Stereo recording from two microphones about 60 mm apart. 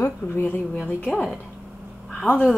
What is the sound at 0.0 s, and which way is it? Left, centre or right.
Speech, left.